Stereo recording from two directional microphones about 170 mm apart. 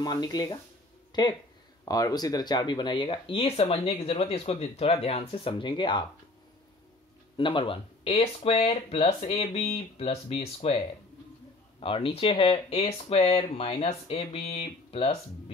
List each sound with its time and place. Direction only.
0.0 s speech: 25° left (ahead or behind)
7.3 s speech: 30° left (ahead or behind)
11.8 s speech: 30° left (ahead or behind)